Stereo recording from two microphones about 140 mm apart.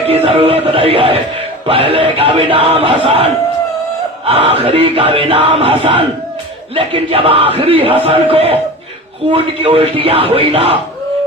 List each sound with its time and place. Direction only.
0.0 s a man's voice: 45° right (ahead or behind)
4.3 s a man's voice: 45° right (ahead or behind)